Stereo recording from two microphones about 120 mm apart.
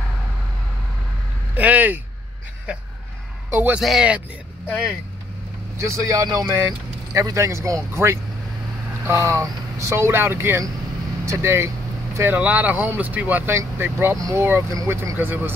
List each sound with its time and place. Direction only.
1.5 s a sound: 15° right (ahead or behind)
3.4 s a man's voice: 20° right (ahead or behind)
3.7 s speech: 5° right (ahead or behind)
5.8 s speech: 25° right (ahead or behind)
15.1 s speech: 15° right (ahead or behind)